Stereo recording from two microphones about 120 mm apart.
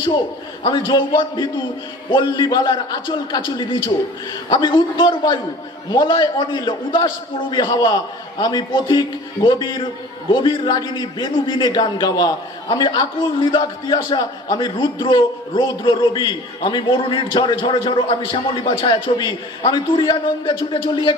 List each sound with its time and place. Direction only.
0.7 s a man's voice: 40° left (ahead or behind)